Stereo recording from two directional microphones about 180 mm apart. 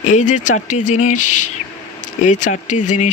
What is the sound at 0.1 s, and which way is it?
Speech, 45° left (ahead or behind).